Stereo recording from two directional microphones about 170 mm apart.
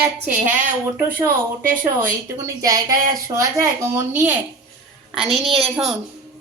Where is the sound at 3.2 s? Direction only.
20° right (ahead or behind); by 6.0 s 5° right (ahead or behind).